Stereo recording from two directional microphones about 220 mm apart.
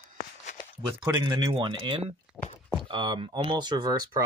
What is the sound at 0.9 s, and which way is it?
Speech, 20° right (ahead or behind).